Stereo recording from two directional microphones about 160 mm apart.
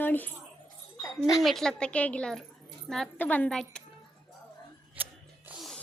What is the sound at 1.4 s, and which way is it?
A woman's voice, centre (ahead or behind).